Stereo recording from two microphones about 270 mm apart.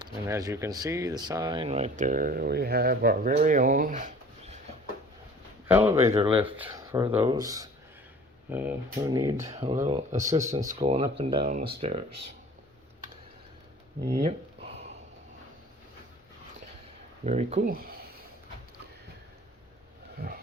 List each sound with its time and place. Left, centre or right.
0.0 s speech: centre
5.6 s speech: centre
14.0 s speech: right
17.2 s speech: right